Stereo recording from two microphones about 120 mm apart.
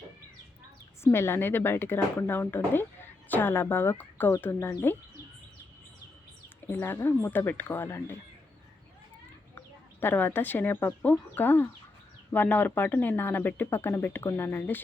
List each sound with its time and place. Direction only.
1.0 s speech: 20° left (ahead or behind)
6.7 s speech: 20° left (ahead or behind)
10.0 s speech: 15° left (ahead or behind)